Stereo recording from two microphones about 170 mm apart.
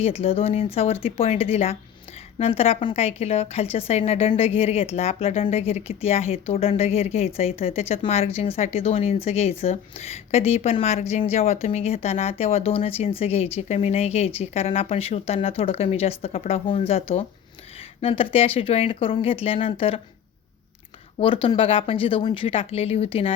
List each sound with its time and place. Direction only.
0.0 s a woman's voice: 35° left (ahead or behind)
21.2 s a woman's voice: 30° left (ahead or behind)